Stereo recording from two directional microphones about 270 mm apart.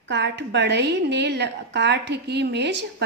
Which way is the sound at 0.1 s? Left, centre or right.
Right.